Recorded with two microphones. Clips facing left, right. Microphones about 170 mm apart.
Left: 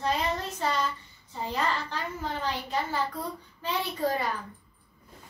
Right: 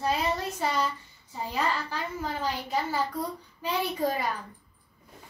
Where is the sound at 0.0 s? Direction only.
10° right (ahead or behind).